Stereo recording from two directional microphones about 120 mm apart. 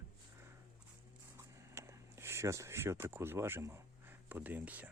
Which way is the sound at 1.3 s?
20° right (ahead or behind).